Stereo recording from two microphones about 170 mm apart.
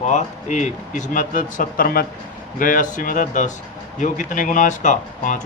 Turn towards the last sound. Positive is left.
turn(degrees=50)  # may be behind; listen again after turning